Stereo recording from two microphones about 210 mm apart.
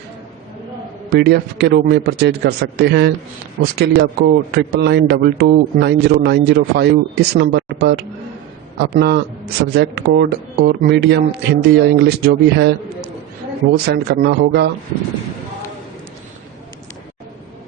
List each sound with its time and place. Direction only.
1.1 s a man's voice: 50° right (ahead or behind)
13.7 s a man's voice: 50° right (ahead or behind)